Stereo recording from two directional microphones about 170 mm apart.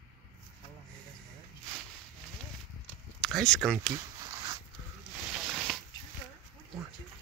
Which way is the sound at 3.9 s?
20° right (ahead or behind).